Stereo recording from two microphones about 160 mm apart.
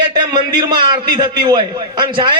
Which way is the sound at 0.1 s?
25° right (ahead or behind).